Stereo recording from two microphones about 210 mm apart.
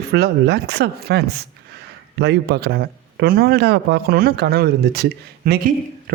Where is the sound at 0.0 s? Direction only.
50° right (ahead or behind).